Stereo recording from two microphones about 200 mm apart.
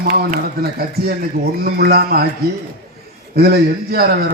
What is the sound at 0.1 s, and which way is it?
A man's voice, 50° right (ahead or behind).